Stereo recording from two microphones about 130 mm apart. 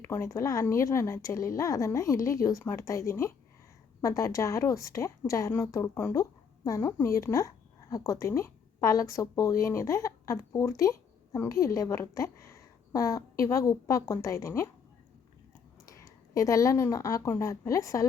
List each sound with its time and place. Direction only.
0.0 s a woman's voice: 20° left (ahead or behind)
15.9 s a woman's voice: 25° left (ahead or behind)